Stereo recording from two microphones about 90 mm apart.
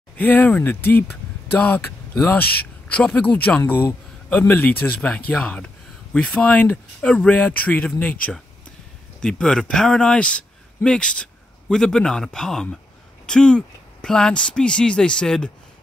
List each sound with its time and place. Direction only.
0.2 s speech: 20° left (ahead or behind)